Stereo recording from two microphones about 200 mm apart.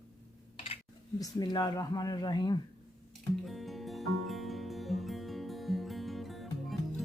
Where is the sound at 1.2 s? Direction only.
20° left (ahead or behind).